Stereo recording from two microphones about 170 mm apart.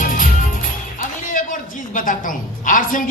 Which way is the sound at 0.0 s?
50° left (ahead or behind).